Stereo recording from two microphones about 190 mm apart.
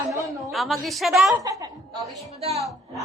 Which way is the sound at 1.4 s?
20° right (ahead or behind).